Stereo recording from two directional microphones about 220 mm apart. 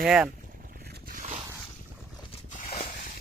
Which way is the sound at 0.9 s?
40° right (ahead or behind).